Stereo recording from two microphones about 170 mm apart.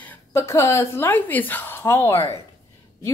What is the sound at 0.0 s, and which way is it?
A woman's voice, 10° left (ahead or behind).